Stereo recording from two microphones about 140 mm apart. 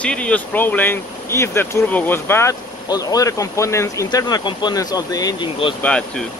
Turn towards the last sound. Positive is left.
turn(degrees=10)  # may be behind; listen again after turning